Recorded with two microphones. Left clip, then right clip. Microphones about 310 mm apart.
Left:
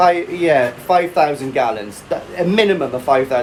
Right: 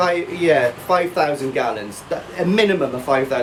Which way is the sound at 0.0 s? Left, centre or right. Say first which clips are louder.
Left 4 dB; centre.